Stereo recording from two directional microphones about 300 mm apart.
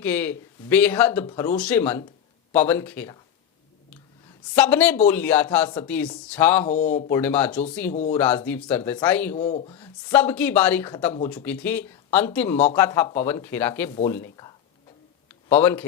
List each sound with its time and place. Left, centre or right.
0.0 s a man's voice: centre
4.5 s a man's voice: centre
6.7 s speech: left
7.1 s a man's voice: centre
9.3 s speech: left
9.7 s a man's voice: centre
13.9 s speech: centre
15.3 s a sound: centre